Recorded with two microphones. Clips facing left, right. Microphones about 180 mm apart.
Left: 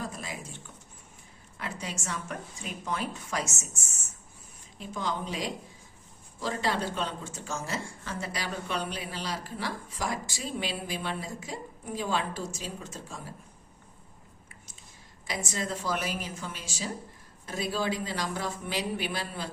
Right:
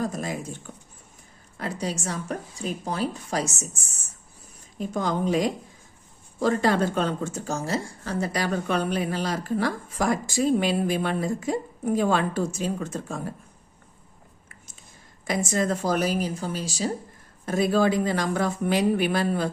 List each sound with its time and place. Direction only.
0.0 s a sound: 45° right (ahead or behind)
1.5 s a woman's voice: 40° right (ahead or behind)
4.8 s a woman's voice: 45° right (ahead or behind)
15.3 s a woman's voice: 50° right (ahead or behind)
17.4 s a woman's voice: 50° right (ahead or behind)